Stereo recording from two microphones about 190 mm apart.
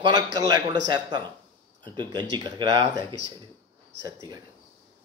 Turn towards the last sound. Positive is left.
turn(degrees=-20)  # may be behind; listen again after turning